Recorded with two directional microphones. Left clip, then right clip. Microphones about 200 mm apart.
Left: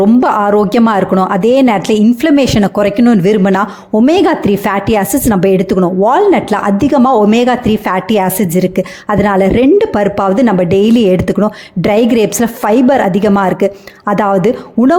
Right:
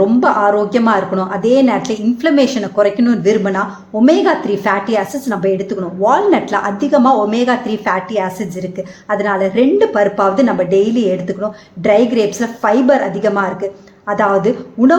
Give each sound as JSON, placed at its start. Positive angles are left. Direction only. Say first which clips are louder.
{"t": 0.1, "sound": "a woman's voice", "louder": "left 2 dB", "side_deg": 45}